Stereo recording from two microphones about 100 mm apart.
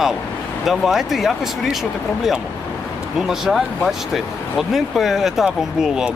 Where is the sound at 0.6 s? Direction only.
5° right (ahead or behind).